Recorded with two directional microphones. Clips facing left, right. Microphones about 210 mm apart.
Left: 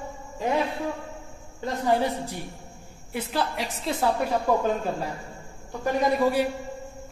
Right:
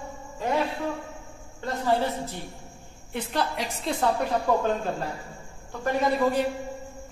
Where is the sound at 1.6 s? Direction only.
15° left (ahead or behind).